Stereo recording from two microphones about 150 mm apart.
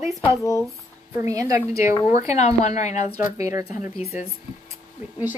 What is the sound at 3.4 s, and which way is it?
Speech, 20° right (ahead or behind).